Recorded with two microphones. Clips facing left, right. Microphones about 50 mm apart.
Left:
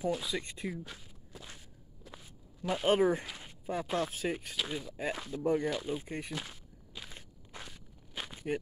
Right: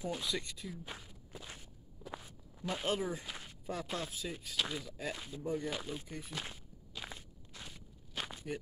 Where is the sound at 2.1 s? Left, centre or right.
Right.